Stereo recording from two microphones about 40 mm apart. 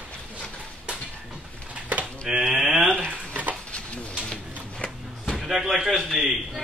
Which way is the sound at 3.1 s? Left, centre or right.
Right.